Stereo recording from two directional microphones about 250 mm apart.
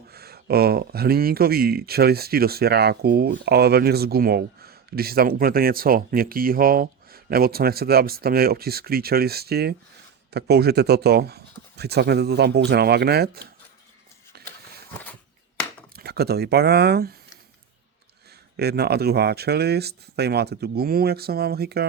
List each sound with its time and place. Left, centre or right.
0.1 s speech: right
14.3 s a sound: right
16.0 s speech: right
18.5 s speech: right